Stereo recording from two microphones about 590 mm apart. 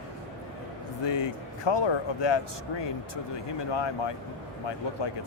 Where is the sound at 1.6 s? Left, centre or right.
Left.